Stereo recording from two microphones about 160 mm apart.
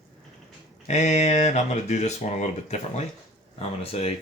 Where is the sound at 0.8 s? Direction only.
45° left (ahead or behind).